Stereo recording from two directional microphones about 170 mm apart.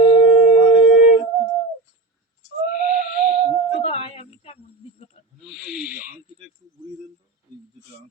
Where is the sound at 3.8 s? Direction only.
35° left (ahead or behind).